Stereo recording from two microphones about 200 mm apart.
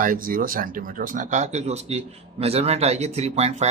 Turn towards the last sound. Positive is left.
turn(degrees=-35)  # may be behind; listen again after turning